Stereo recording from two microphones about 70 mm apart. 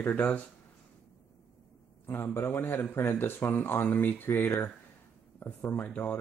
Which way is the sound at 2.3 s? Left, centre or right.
Left.